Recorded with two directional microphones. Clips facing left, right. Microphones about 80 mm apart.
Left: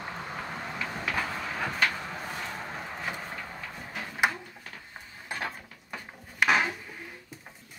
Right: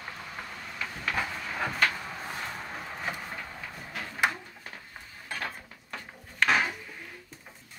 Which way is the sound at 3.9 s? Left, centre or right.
Centre.